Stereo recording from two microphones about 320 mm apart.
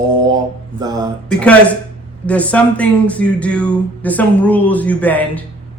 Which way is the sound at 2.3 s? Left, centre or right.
Centre.